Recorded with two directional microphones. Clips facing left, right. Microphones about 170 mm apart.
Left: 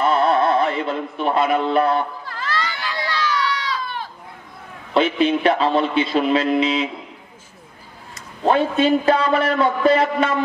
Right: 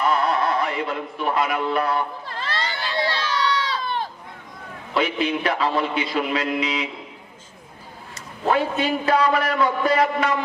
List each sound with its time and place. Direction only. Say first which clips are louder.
0.0 s music: left 4 dB; 25° left (ahead or behind)
1.2 s a man's voice: left 4 dB; 25° left (ahead or behind)
2.2 s a sound: left 2 dB; 25° right (ahead or behind)
4.9 s a man's voice: left 5 dB; 25° left (ahead or behind)
8.5 s a man's voice: left 5 dB; 25° left (ahead or behind)